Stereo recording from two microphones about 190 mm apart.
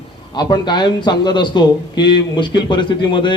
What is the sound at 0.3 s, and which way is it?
A man's voice, 25° left (ahead or behind).